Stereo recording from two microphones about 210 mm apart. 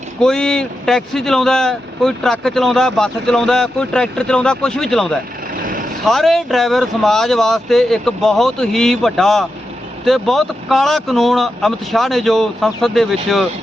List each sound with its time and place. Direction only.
0.2 s speech: 5° left (ahead or behind)
5.5 s vehicle: 40° right (ahead or behind)
6.1 s speech: centre (ahead or behind)